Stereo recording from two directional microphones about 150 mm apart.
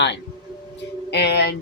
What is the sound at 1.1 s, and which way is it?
Speech, 90° left.